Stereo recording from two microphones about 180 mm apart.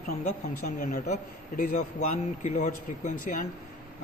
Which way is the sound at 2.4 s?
40° left (ahead or behind).